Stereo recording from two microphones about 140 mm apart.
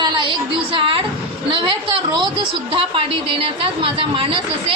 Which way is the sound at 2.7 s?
40° right (ahead or behind).